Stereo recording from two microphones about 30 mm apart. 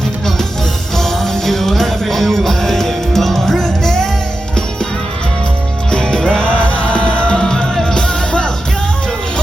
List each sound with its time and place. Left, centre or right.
0.9 s music: centre
5.9 s music: left
6.4 s music: left
7.4 s music: left